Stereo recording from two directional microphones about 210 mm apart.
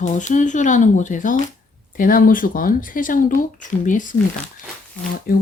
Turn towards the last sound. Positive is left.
turn(degrees=45)  # may be behind; listen again after turning